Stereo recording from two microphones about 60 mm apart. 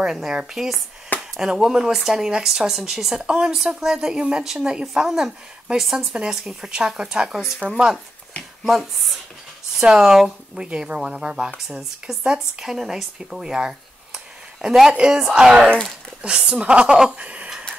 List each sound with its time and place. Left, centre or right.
0.0 s speech: centre
8.6 s speech: centre; by 17.5 s right